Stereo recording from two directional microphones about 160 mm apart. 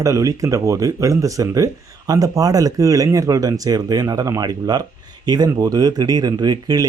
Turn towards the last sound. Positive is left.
turn(degrees=-25)  # may be behind; listen again after turning